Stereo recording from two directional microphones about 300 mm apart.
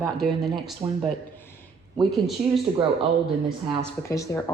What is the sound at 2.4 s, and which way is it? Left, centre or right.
Speech, centre.